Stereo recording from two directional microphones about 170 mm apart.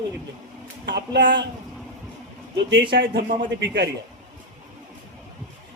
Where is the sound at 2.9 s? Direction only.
75° right (ahead or behind).